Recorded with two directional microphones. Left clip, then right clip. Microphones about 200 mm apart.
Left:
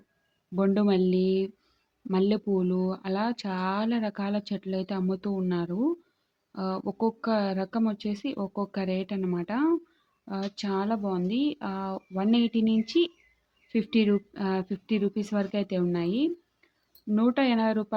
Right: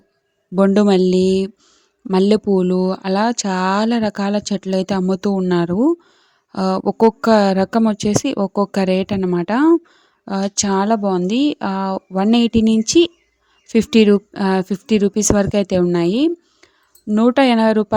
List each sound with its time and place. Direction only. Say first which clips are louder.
0.5 s speech: right 12 dB; 40° right (ahead or behind)